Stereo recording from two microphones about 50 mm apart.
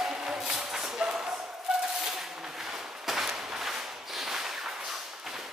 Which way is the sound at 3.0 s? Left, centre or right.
Centre.